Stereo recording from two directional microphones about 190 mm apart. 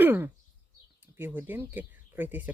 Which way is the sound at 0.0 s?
10° right (ahead or behind).